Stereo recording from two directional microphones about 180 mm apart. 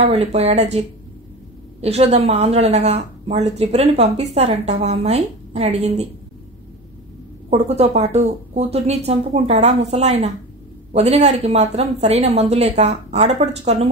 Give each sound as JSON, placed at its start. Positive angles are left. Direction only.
{"t": 0.0, "sound": "speech", "side_deg": -35}
{"t": 1.8, "sound": "speech", "side_deg": -35}
{"t": 7.4, "sound": "speech", "side_deg": -35}